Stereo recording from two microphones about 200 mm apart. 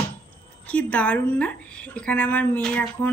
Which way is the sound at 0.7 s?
5° left (ahead or behind).